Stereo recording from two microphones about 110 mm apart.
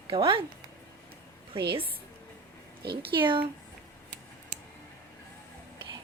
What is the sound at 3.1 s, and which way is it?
Speech, 50° right (ahead or behind).